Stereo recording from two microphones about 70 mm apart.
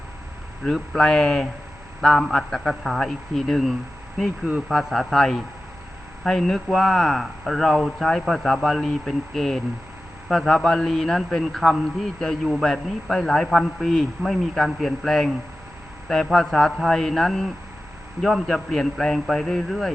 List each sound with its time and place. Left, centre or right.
0.6 s speech: centre